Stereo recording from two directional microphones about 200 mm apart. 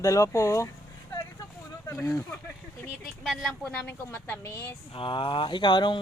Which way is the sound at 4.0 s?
10° left (ahead or behind).